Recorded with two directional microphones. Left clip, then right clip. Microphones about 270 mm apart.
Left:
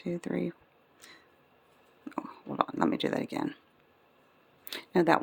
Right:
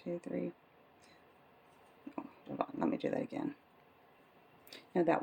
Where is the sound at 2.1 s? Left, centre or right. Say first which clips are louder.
Left 7 dB; left.